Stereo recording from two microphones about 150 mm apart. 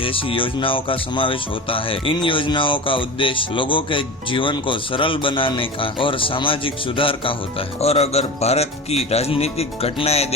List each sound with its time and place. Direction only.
0.0 s speech: 35° left (ahead or behind)